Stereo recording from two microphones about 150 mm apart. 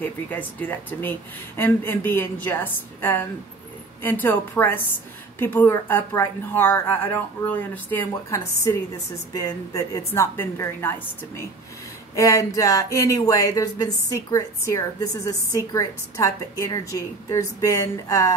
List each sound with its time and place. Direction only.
0.0 s a woman's voice: 10° left (ahead or behind)